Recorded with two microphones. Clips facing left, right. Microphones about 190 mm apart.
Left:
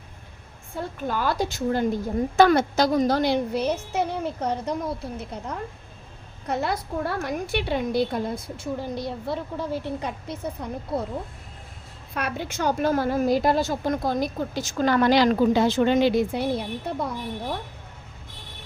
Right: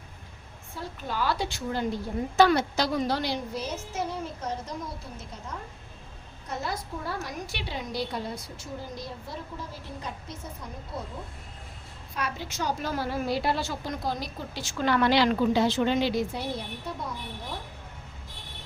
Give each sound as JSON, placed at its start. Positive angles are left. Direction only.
{"t": 0.8, "sound": "a woman's voice", "side_deg": 50}
{"t": 12.1, "sound": "a woman's voice", "side_deg": 60}